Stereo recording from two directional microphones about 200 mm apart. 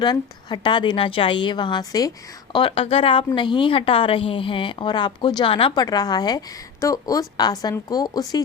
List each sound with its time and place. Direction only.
0.0 s a woman's voice: 20° left (ahead or behind)